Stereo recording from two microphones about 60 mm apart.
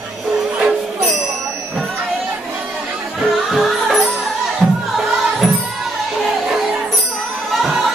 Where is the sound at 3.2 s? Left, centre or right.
Centre.